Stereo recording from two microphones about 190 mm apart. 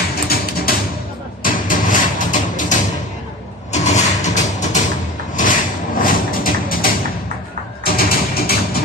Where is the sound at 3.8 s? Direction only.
40° left (ahead or behind).